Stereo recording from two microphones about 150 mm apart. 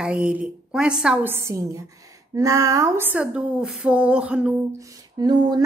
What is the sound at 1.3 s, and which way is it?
A woman's voice, 20° right (ahead or behind).